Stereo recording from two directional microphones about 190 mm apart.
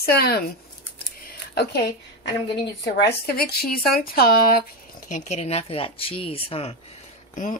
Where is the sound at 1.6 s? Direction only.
60° left (ahead or behind).